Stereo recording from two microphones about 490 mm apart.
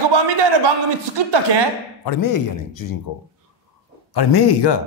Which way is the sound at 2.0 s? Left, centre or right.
Left.